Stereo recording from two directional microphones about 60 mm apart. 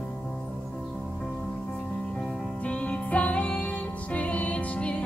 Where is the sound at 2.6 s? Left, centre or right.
Left.